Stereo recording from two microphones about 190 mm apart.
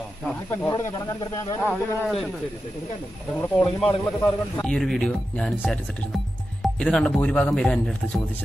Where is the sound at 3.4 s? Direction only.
5° left (ahead or behind).